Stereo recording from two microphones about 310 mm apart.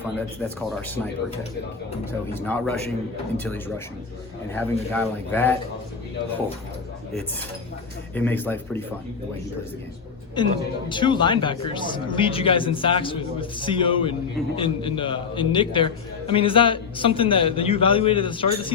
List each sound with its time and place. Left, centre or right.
0.8 s speech: centre
2.3 s a man's voice: centre
8.1 s a man's voice: centre
10.3 s a man's voice: centre